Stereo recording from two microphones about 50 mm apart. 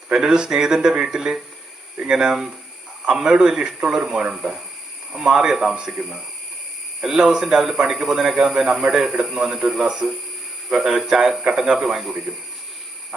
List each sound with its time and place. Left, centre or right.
0.1 s a man's voice: centre